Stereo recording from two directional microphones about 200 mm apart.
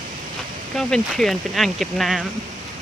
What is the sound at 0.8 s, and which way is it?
Speech, centre (ahead or behind).